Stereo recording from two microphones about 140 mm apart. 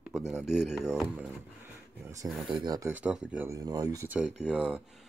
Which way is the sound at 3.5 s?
25° right (ahead or behind).